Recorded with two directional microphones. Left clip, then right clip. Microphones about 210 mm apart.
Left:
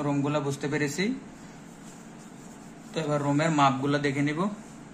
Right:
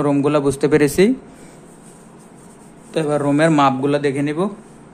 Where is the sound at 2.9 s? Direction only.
50° right (ahead or behind).